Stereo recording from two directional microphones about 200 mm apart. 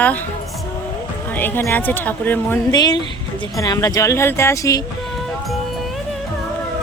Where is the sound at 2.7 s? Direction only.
20° left (ahead or behind).